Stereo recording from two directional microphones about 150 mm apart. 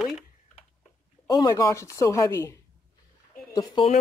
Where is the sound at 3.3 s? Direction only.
25° left (ahead or behind).